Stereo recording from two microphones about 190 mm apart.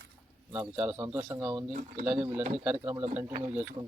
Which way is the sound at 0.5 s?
10° right (ahead or behind).